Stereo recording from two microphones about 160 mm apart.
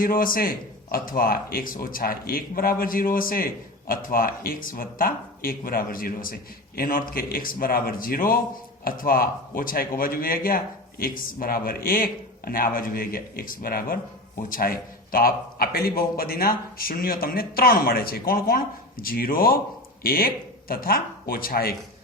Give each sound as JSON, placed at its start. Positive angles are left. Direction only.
{"t": 0.0, "sound": "a man's voice", "side_deg": 65}